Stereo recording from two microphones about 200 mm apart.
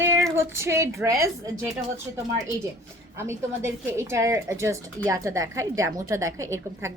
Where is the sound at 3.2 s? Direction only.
15° right (ahead or behind).